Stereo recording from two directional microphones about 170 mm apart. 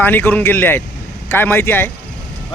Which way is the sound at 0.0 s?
10° left (ahead or behind).